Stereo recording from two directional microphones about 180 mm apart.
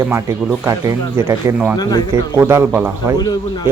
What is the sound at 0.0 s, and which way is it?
A man's voice, 15° right (ahead or behind).